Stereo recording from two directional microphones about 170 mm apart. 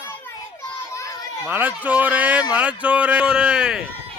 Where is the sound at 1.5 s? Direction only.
10° right (ahead or behind).